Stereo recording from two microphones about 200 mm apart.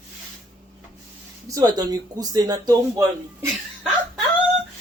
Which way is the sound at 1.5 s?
20° right (ahead or behind).